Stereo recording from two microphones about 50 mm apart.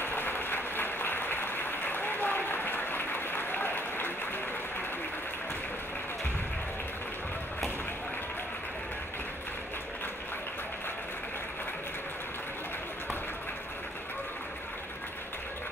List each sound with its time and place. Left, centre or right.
0.0 s applause: left